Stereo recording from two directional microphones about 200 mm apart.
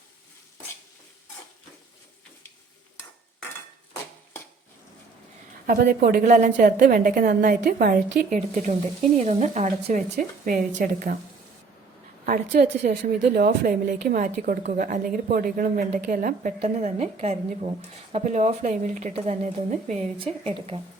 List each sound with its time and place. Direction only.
5.6 s a woman's voice: 50° right (ahead or behind)
12.2 s speech: 45° right (ahead or behind)
12.9 s a woman's voice: 50° right (ahead or behind); by 20.8 s 25° right (ahead or behind)